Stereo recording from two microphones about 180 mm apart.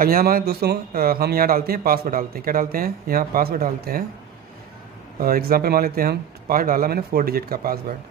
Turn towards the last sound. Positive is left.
turn(degrees=-55)  # may be behind; listen again after turning